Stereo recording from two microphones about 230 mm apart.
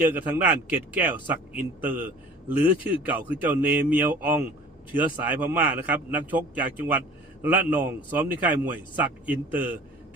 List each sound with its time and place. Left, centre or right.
0.1 s a man's voice: centre